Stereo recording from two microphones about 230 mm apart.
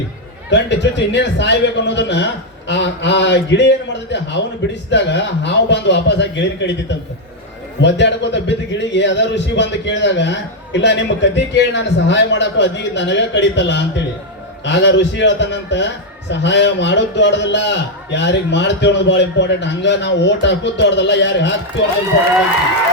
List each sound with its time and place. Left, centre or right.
0.5 s a man's voice: left
7.8 s a man's voice: left